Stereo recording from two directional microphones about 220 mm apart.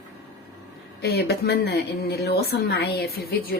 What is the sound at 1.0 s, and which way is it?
Speech, 50° left (ahead or behind).